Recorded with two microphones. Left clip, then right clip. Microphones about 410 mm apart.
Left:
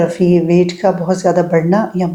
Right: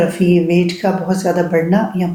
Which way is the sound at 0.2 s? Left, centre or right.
Left.